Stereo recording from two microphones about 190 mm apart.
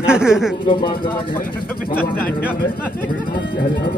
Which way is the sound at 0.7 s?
25° left (ahead or behind).